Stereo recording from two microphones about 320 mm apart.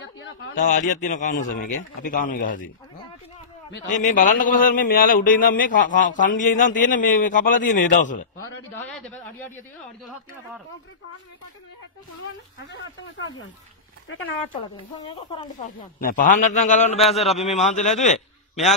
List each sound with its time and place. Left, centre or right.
0.0 s a sound: left
0.6 s speech: left
3.7 s speech: left
8.8 s a man's voice: centre
12.7 s speech: left
15.0 s speech: centre
17.0 s a man's voice: centre
17.6 s speech: left